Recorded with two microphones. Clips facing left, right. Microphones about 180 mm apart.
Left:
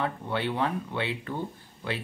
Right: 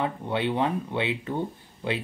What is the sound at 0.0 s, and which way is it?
Speech, 20° right (ahead or behind).